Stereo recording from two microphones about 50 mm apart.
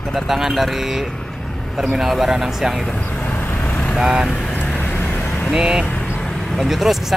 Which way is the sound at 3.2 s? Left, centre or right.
Left.